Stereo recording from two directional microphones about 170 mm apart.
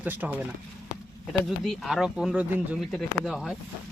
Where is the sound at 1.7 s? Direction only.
Centre (ahead or behind).